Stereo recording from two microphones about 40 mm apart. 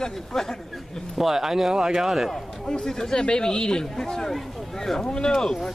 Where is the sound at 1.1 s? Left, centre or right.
Centre.